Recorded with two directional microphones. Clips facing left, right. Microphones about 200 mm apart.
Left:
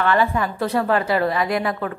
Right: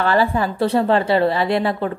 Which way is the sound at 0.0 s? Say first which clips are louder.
Right 2 dB; 35° right (ahead or behind).